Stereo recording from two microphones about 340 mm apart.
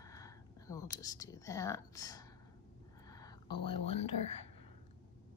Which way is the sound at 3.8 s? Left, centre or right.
Centre.